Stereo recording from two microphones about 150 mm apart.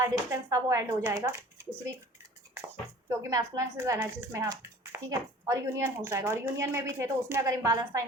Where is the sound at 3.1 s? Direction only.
20° right (ahead or behind).